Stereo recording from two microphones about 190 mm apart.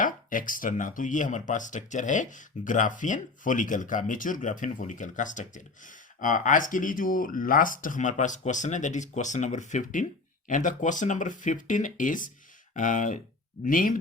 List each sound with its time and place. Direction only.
0.0 s speech: 45° left (ahead or behind)